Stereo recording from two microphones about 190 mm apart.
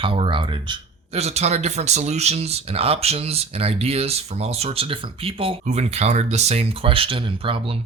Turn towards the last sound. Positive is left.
turn(degrees=-25)  # may be behind; listen again after turning